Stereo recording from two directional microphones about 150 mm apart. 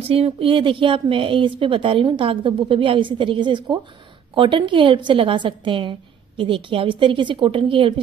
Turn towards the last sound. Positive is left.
turn(degrees=-35)  # may be behind; listen again after turning